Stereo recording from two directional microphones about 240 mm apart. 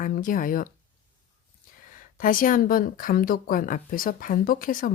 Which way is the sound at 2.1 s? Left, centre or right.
Left.